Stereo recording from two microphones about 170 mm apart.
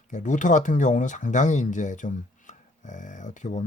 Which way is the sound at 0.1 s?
45° left (ahead or behind).